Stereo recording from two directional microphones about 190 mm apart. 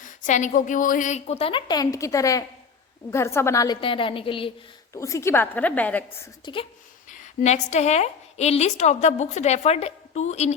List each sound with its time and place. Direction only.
0.0 s a woman's voice: 40° left (ahead or behind); by 3.8 s 15° left (ahead or behind)
3.8 s a woman's voice: 25° left (ahead or behind)
4.9 s a woman's voice: 15° left (ahead or behind)
6.4 s a woman's voice: 25° left (ahead or behind)
7.1 s a woman's voice: 40° left (ahead or behind)